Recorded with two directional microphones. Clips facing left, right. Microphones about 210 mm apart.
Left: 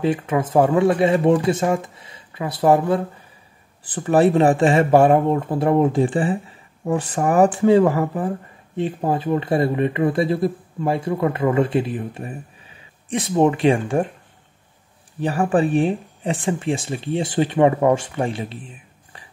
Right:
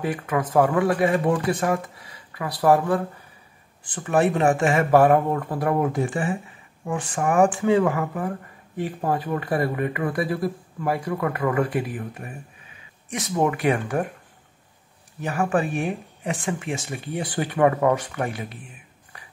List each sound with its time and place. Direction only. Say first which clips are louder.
0.0 s speech: left 5 dB; 25° left (ahead or behind)
3.8 s speech: left 5 dB; 35° left (ahead or behind)
15.1 s speech: left 4 dB; 30° left (ahead or behind)
19.1 s a sound: left 2 dB; 30° left (ahead or behind)